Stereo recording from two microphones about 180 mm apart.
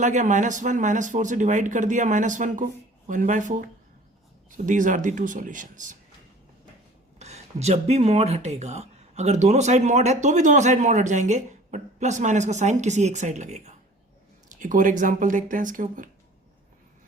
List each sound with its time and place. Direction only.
0.0 s speech: 45° right (ahead or behind)
7.2 s speech: 40° right (ahead or behind)